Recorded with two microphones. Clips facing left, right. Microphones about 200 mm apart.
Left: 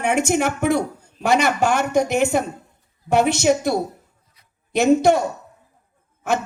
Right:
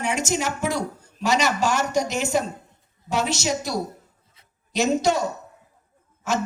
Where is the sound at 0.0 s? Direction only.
60° left (ahead or behind).